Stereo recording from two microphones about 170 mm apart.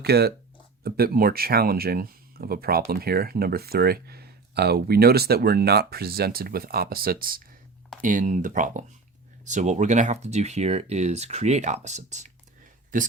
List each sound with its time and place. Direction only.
0.0 s speech: 70° right (ahead or behind); by 13.1 s 50° right (ahead or behind)